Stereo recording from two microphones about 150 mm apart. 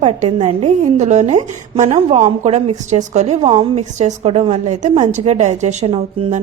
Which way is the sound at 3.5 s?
35° right (ahead or behind).